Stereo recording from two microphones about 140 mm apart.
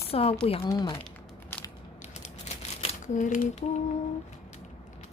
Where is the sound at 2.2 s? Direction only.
55° left (ahead or behind).